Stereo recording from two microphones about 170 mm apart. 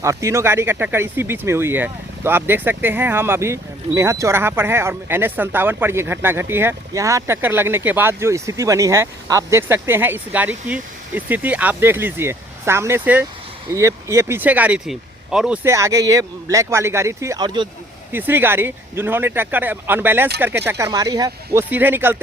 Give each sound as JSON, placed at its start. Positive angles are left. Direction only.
{"t": 0.0, "sound": "speech", "side_deg": -15}
{"t": 15.7, "sound": "speech", "side_deg": -20}
{"t": 18.1, "sound": "speech", "side_deg": -10}
{"t": 21.6, "sound": "speech", "side_deg": -10}